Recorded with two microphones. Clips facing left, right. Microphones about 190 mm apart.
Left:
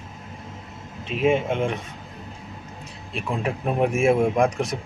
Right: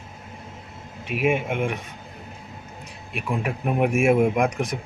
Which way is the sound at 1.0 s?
10° right (ahead or behind).